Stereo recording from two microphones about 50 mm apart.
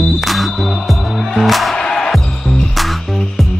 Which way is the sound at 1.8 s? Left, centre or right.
Centre.